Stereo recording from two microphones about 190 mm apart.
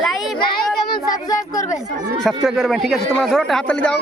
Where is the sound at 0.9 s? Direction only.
15° left (ahead or behind).